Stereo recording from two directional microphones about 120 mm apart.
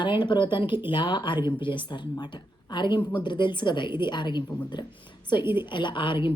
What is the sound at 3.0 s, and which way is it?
Speech, 10° left (ahead or behind).